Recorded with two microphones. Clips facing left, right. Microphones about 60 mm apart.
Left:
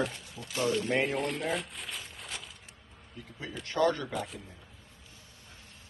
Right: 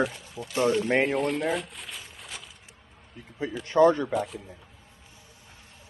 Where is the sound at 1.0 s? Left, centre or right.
Centre.